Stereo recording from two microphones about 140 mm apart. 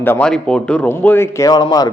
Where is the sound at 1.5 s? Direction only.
30° left (ahead or behind).